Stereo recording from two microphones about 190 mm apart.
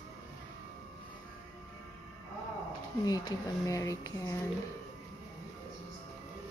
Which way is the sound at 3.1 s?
20° left (ahead or behind).